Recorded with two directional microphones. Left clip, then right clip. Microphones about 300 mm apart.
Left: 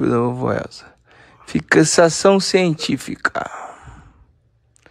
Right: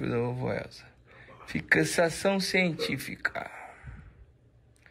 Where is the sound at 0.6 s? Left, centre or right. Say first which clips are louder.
Left 11 dB; left.